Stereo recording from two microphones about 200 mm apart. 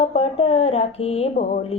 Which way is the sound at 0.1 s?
30° left (ahead or behind).